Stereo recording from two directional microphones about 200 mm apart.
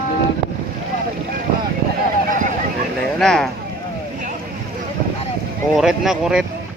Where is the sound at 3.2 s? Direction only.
Centre (ahead or behind).